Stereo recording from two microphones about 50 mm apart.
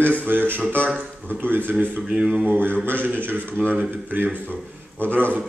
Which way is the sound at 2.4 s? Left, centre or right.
Right.